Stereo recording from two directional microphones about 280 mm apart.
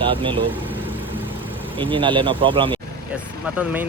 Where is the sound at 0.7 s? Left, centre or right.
Centre.